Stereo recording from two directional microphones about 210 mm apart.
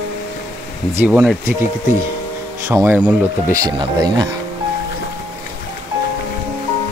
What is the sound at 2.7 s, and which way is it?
Speech, 10° right (ahead or behind).